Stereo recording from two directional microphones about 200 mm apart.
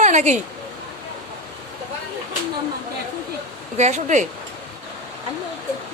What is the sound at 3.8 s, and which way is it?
Speech, 35° right (ahead or behind).